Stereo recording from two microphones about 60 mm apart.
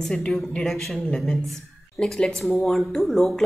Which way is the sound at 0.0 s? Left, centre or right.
Centre.